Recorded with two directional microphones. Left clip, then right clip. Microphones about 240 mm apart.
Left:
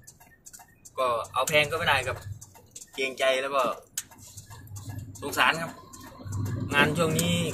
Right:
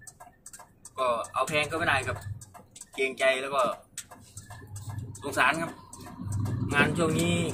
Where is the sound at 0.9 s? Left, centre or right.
Centre.